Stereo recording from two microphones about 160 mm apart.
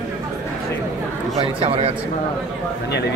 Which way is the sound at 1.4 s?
35° right (ahead or behind).